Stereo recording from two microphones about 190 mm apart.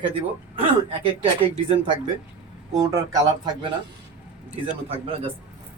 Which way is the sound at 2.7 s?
20° right (ahead or behind).